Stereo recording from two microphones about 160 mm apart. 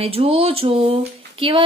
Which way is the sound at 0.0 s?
40° right (ahead or behind).